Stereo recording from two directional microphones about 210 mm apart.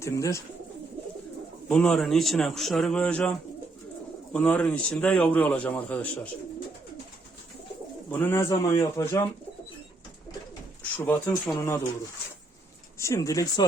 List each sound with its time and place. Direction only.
0.0 s a man's voice: 15° left (ahead or behind)
1.6 s a man's voice: 5° left (ahead or behind)
8.1 s a man's voice: 10° left (ahead or behind)
10.9 s a man's voice: 10° left (ahead or behind)
13.0 s a man's voice: 15° left (ahead or behind)